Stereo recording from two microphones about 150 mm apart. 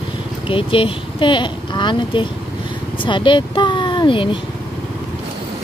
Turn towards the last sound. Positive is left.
turn(degrees=35)  # may be behind; listen again after turning